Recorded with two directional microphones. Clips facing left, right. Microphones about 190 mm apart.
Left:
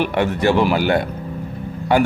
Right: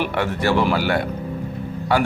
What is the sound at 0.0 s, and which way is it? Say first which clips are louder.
A man's voice: left 4 dB; 20° left (ahead or behind).